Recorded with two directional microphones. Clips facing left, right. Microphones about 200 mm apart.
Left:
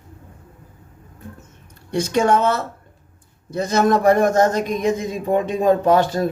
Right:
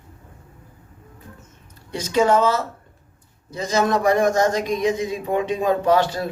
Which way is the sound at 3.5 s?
60° left (ahead or behind).